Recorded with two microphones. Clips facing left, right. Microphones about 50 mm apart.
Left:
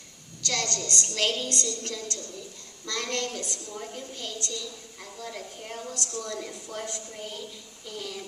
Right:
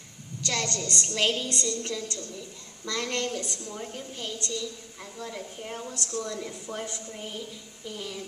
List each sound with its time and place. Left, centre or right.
0.4 s a woman's voice: centre